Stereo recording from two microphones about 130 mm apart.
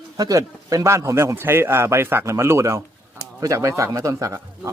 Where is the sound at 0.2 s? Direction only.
25° right (ahead or behind).